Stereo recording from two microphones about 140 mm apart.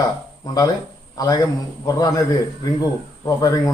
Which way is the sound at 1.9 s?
25° left (ahead or behind).